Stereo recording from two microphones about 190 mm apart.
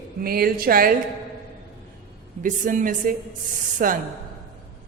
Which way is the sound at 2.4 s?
45° right (ahead or behind).